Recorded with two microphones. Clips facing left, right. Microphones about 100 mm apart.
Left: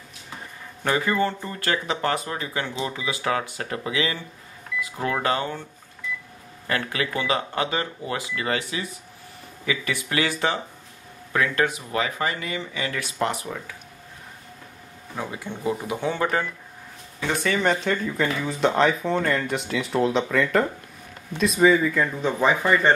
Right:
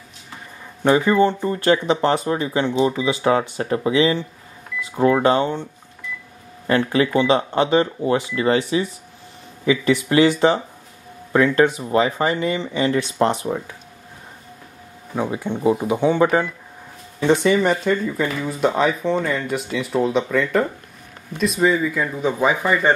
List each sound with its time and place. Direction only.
0.8 s speech: 20° right (ahead or behind)
6.7 s speech: 25° right (ahead or behind)
11.3 s speech: 25° right (ahead or behind)
15.1 s speech: 20° right (ahead or behind)
17.6 s speech: 5° right (ahead or behind)